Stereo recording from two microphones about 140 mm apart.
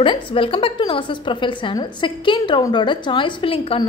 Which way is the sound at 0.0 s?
40° left (ahead or behind).